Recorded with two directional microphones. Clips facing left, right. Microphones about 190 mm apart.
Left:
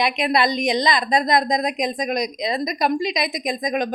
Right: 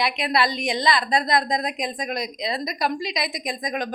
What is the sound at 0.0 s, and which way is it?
Speech, 20° left (ahead or behind).